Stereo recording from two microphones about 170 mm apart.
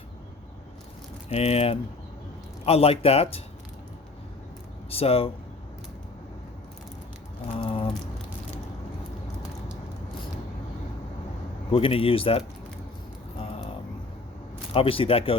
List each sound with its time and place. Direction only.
1.3 s speech: 35° left (ahead or behind)
4.9 s speech: 35° left (ahead or behind)
7.4 s a sound: 35° left (ahead or behind)
11.7 s speech: 35° left (ahead or behind)
13.4 s a sound: 35° left (ahead or behind)
14.7 s speech: 35° left (ahead or behind)